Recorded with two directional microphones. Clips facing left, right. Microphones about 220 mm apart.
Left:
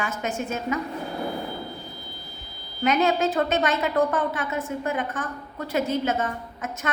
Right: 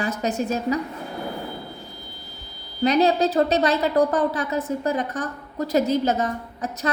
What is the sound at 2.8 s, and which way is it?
A woman's voice, 35° right (ahead or behind).